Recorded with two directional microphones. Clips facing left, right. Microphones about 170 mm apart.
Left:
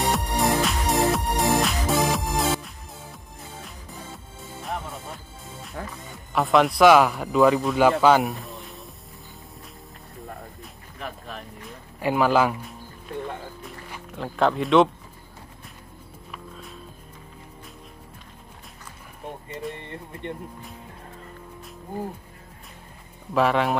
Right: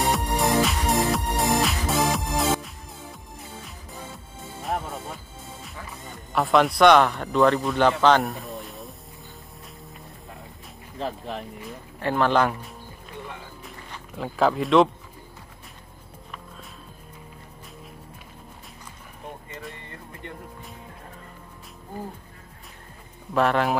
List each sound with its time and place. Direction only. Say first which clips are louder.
0.0 s music: even; centre (ahead or behind)
4.6 s music: right 3 dB; centre (ahead or behind)
6.3 s speech: even; centre (ahead or behind)
11.0 s speech: right 6 dB; 25° right (ahead or behind)
12.0 s speech: left 1 dB; 10° left (ahead or behind)
14.1 s speech: even; centre (ahead or behind)
23.3 s speech: even; centre (ahead or behind)